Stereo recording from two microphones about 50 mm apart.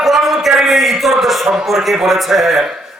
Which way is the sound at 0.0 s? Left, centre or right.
Centre.